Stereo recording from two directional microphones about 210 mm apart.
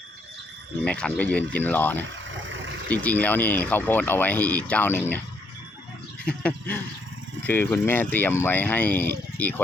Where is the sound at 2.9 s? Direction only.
5° left (ahead or behind).